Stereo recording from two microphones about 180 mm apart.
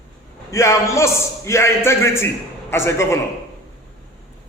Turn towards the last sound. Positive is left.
turn(degrees=15)  # may be behind; listen again after turning